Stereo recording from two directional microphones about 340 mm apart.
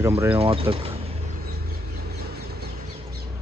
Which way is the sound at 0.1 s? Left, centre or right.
Centre.